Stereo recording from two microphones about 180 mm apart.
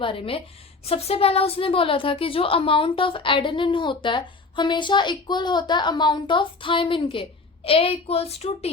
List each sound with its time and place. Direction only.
0.0 s a woman's voice: 30° left (ahead or behind)